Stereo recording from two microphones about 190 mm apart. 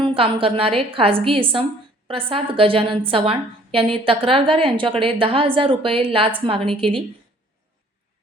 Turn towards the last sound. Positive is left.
turn(degrees=-30)  # may be behind; listen again after turning